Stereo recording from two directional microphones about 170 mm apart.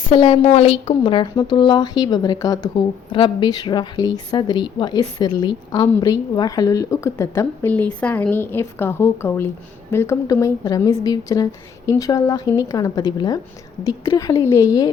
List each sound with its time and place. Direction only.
0.1 s a woman's voice: 35° left (ahead or behind)